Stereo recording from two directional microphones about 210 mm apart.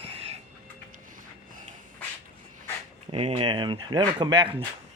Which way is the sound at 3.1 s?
30° right (ahead or behind).